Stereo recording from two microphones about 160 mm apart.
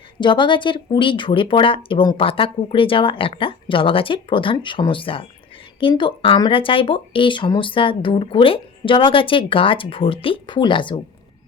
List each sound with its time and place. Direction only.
0.2 s speech: 30° left (ahead or behind)